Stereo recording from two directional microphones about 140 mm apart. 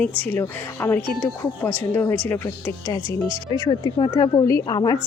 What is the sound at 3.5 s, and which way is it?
A woman's voice, 30° left (ahead or behind).